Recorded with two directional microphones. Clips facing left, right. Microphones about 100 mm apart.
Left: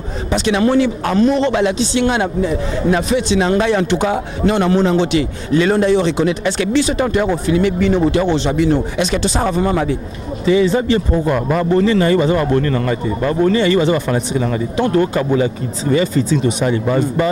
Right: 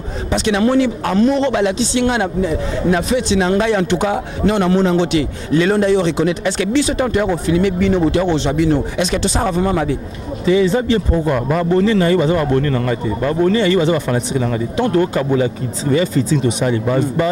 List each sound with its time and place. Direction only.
0.3 s speech: 20° left (ahead or behind)
9.4 s speech: 25° left (ahead or behind)